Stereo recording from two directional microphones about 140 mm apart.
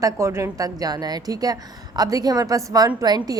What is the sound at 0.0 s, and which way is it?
A woman's voice, 20° right (ahead or behind).